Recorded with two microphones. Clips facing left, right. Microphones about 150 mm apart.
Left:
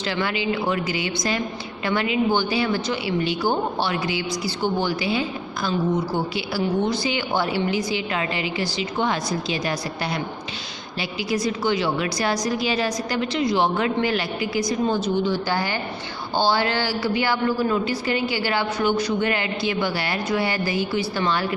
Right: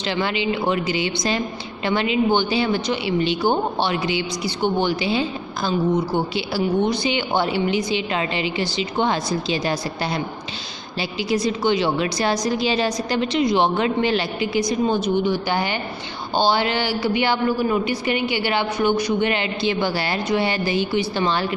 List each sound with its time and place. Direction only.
0.0 s a woman's voice: 20° right (ahead or behind)